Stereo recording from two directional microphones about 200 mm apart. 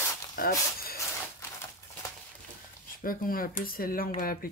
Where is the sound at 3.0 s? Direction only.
45° left (ahead or behind).